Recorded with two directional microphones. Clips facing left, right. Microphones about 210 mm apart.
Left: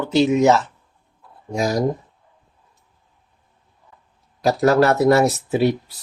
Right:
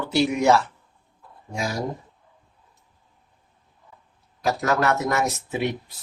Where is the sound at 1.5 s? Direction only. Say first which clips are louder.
Left 8 dB; 40° left (ahead or behind).